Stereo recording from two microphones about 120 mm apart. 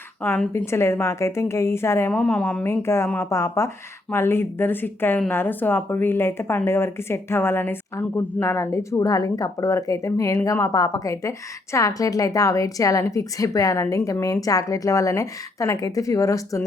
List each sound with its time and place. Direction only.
0.2 s a woman's voice: 15° left (ahead or behind)
2.1 s a woman's voice: 10° left (ahead or behind)
2.6 s a woman's voice: 20° left (ahead or behind)